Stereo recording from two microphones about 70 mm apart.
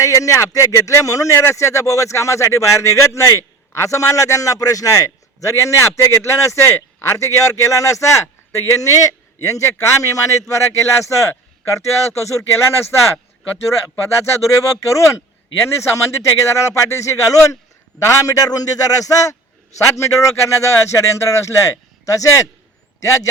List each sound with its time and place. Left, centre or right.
0.0 s speech: left
14.4 s a man's voice: left